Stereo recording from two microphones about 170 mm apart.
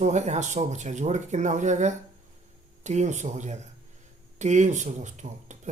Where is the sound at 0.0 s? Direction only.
40° right (ahead or behind).